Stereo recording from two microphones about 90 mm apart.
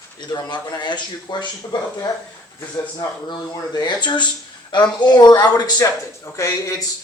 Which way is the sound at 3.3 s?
55° left (ahead or behind).